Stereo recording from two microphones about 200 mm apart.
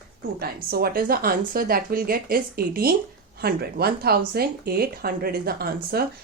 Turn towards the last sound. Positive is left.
turn(degrees=-50)  # may be behind; listen again after turning